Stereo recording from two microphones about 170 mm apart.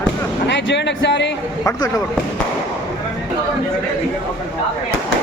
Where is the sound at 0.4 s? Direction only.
90° left.